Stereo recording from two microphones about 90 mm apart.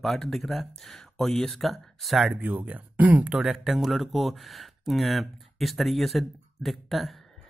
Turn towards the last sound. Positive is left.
turn(degrees=0)  # may be behind; listen again after turning